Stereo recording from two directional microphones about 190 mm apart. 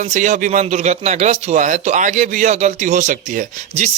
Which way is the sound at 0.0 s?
40° right (ahead or behind).